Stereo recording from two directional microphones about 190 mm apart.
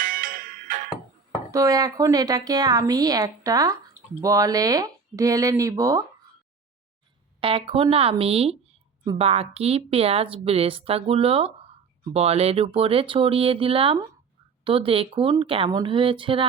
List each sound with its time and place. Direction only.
0.0 s music: 45° right (ahead or behind)
1.5 s a woman's voice: 15° right (ahead or behind)
7.4 s a woman's voice: 30° right (ahead or behind)